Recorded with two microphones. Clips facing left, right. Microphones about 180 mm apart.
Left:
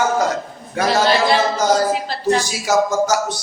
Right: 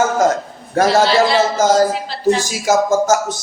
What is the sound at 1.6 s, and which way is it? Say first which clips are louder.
A man's voice: right 3 dB; 45° right (ahead or behind).